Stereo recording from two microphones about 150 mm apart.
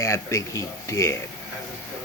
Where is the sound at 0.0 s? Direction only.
20° left (ahead or behind).